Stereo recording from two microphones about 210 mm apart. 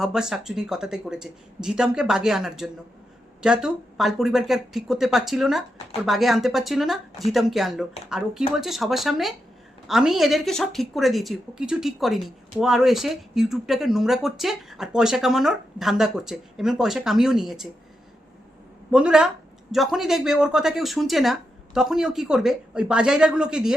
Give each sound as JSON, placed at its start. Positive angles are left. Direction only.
{"t": 0.0, "sound": "speech", "side_deg": -5}
{"t": 18.9, "sound": "speech", "side_deg": -5}